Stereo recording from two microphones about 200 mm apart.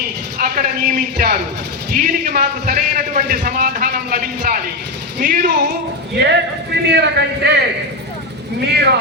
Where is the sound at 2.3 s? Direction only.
50° right (ahead or behind).